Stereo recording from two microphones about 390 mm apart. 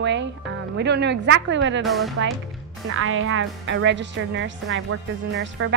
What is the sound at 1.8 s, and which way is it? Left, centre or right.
Speech, centre.